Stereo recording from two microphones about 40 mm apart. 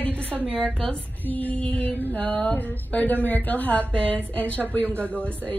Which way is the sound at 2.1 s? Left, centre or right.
Left.